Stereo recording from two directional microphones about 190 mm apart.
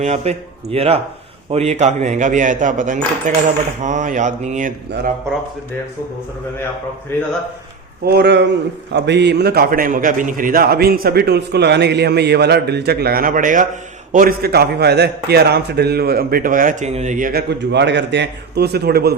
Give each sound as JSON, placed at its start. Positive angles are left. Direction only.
{"t": 0.0, "sound": "speech", "side_deg": -35}
{"t": 8.0, "sound": "a man's voice", "side_deg": -60}